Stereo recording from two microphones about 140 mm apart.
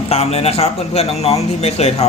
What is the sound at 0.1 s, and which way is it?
A man's voice, 45° left (ahead or behind).